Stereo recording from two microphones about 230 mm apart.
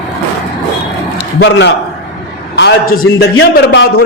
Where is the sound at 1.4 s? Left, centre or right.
Left.